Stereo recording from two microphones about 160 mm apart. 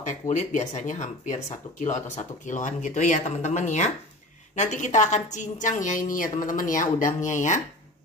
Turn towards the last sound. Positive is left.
turn(degrees=50)  # may be behind; listen again after turning